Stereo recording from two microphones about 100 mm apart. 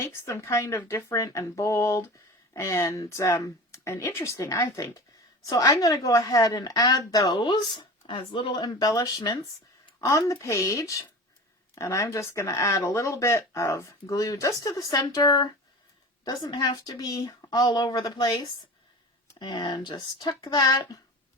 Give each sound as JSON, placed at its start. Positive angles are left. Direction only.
{"t": 0.0, "sound": "speech", "side_deg": 30}
{"t": 7.3, "sound": "speech", "side_deg": 50}
{"t": 8.5, "sound": "speech", "side_deg": 40}